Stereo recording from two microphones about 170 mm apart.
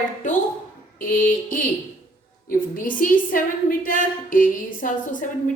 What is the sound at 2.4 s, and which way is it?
A woman's voice, 55° left (ahead or behind).